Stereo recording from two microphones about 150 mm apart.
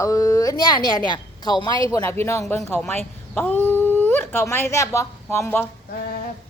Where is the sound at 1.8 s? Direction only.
20° left (ahead or behind).